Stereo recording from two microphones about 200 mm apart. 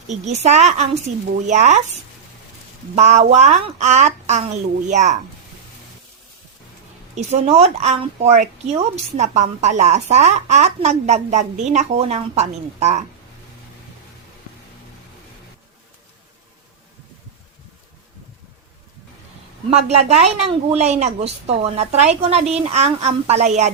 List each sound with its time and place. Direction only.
0.1 s speech: 35° right (ahead or behind)
2.9 s speech: 35° right (ahead or behind)
7.2 s speech: 30° right (ahead or behind)
19.7 s speech: 30° right (ahead or behind)